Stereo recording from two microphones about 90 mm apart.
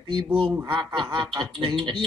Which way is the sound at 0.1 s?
65° right (ahead or behind).